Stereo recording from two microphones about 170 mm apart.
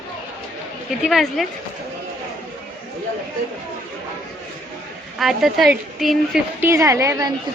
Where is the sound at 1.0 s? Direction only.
Centre (ahead or behind).